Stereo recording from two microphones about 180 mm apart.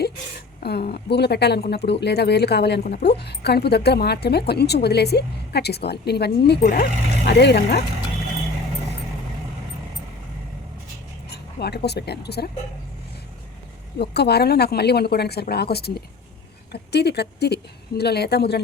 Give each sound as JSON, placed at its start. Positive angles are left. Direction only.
{"t": 0.6, "sound": "speech", "side_deg": 60}
{"t": 11.3, "sound": "speech", "side_deg": 65}
{"t": 14.0, "sound": "speech", "side_deg": 65}